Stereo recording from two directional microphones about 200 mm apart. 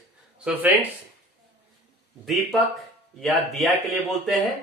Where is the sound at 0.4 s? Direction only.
5° right (ahead or behind).